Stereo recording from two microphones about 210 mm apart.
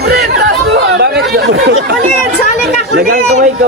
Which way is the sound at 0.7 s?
55° right (ahead or behind).